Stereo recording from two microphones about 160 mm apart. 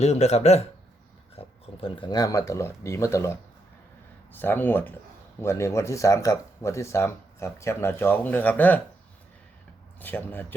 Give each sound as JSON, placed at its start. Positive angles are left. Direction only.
{"t": 0.0, "sound": "a man's voice", "side_deg": 45}
{"t": 1.4, "sound": "speech", "side_deg": 30}
{"t": 10.0, "sound": "speech", "side_deg": 10}